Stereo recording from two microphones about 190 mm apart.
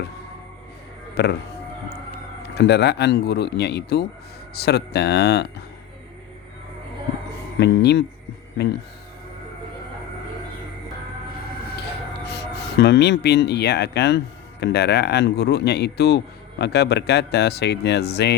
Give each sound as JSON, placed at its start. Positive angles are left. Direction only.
{"t": 1.1, "sound": "speech", "side_deg": 60}
{"t": 2.6, "sound": "speech", "side_deg": 60}
{"t": 7.6, "sound": "speech", "side_deg": 60}
{"t": 12.3, "sound": "speech", "side_deg": 60}